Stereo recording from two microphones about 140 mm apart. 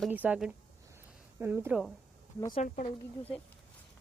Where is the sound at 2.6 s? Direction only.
70° left (ahead or behind).